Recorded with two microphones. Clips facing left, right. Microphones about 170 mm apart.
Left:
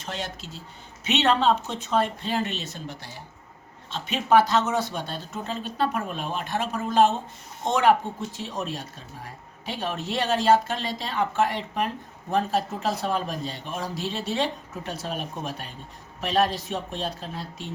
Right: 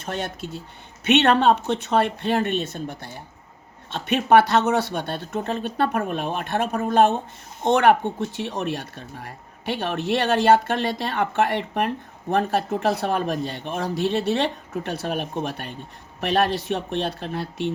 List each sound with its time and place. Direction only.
0.0 s speech: 55° right (ahead or behind)